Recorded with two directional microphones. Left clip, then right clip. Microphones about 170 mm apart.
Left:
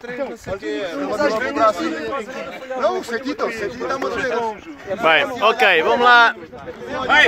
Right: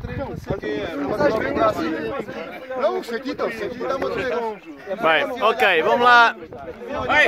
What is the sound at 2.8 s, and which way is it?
Speech, 40° right (ahead or behind).